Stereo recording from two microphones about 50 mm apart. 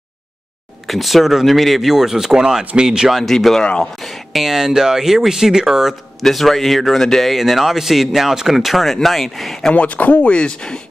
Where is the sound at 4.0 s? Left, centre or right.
Centre.